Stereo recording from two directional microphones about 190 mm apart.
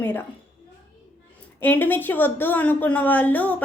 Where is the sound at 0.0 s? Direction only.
10° left (ahead or behind).